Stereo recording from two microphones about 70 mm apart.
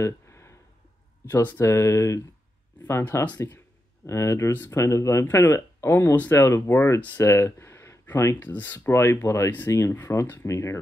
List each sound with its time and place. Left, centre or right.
0.0 s a sound: left
1.3 s speech: left
1.7 s speech: left
3.0 s speech: left
8.4 s speech: left
8.7 s speech: left